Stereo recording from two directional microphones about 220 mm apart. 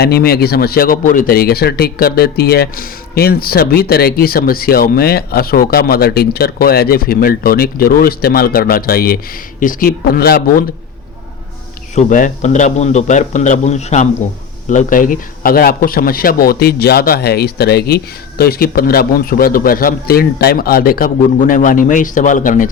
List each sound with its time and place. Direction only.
0.0 s a man's voice: 45° left (ahead or behind)
11.9 s a man's voice: 35° left (ahead or behind)